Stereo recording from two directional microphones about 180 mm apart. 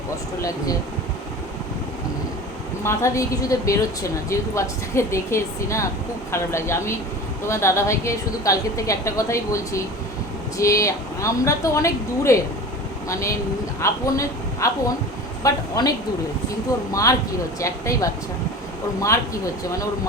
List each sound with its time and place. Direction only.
2.8 s a woman's voice: 15° left (ahead or behind)